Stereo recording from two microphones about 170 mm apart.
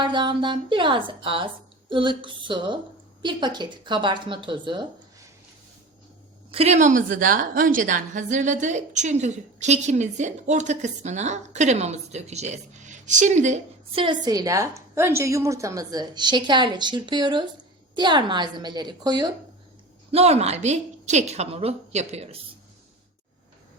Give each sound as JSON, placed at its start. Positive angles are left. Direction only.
{"t": 0.0, "sound": "speech", "side_deg": -30}
{"t": 6.5, "sound": "a woman's voice", "side_deg": -40}
{"t": 20.1, "sound": "a woman's voice", "side_deg": -40}